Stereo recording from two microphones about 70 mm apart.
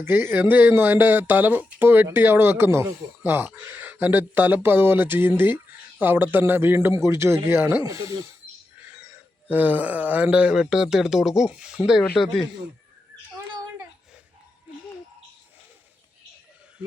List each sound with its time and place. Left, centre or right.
0.0 s speech: right
7.9 s speech: right
9.5 s speech: right
12.1 s speech: centre